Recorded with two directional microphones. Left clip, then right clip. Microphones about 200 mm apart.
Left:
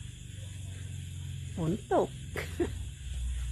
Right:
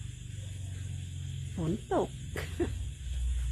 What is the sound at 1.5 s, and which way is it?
Speech, 5° left (ahead or behind).